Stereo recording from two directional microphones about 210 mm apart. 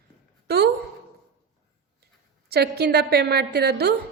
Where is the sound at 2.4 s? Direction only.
50° right (ahead or behind).